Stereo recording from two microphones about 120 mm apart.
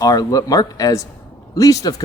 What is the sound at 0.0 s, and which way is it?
A woman's voice, 30° left (ahead or behind).